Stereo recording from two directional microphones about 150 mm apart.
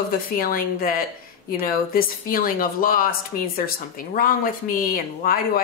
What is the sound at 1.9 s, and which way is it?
Speech, 70° left (ahead or behind).